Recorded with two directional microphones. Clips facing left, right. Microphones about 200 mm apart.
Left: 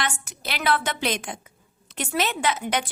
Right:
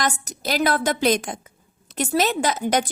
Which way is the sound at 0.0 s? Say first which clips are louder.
Right 5 dB; 40° right (ahead or behind).